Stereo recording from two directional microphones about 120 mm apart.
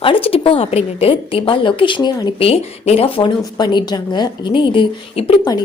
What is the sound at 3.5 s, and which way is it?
Speech, 35° left (ahead or behind).